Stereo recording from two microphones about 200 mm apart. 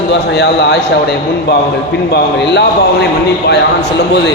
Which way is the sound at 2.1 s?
60° left (ahead or behind).